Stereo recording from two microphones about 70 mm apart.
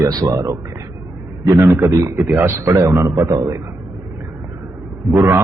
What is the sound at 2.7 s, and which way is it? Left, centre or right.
Speech, right.